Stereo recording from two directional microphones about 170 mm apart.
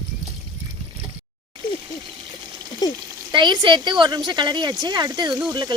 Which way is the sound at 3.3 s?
25° right (ahead or behind).